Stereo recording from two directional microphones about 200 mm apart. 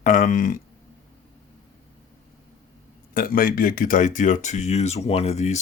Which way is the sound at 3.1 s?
45° left (ahead or behind).